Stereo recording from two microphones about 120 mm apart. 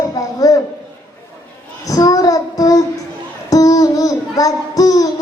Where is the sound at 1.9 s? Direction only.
30° left (ahead or behind).